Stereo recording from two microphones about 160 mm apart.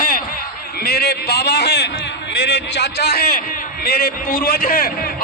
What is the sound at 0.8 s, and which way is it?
A man's voice, 75° left (ahead or behind).